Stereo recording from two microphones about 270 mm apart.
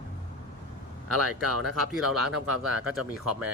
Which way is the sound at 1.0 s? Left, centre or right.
Right.